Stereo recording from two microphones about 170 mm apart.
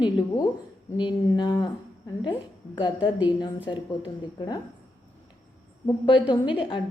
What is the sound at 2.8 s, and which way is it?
Speech, 30° left (ahead or behind).